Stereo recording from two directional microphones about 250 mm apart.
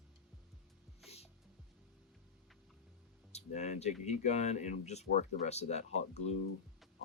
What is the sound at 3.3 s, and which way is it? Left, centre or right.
Speech, left.